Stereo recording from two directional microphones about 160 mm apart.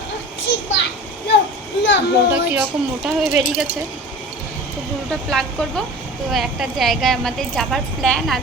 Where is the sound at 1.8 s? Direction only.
90° left.